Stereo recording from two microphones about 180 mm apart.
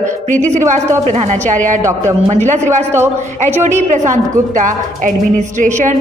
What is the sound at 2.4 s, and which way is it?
A woman's voice, 40° right (ahead or behind).